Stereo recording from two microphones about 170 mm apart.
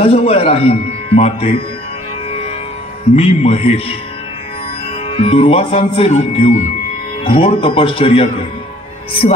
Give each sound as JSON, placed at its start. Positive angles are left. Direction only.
{"t": 0.0, "sound": "speech", "side_deg": 35}
{"t": 3.2, "sound": "speech", "side_deg": 35}
{"t": 5.0, "sound": "speech", "side_deg": 35}